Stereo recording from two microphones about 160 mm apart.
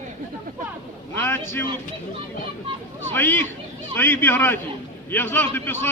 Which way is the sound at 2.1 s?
35° right (ahead or behind).